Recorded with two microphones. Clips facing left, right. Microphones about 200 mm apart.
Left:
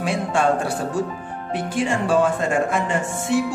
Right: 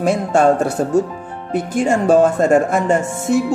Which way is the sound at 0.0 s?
45° right (ahead or behind).